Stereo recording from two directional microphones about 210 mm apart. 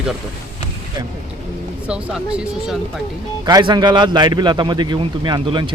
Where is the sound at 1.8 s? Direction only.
5° right (ahead or behind).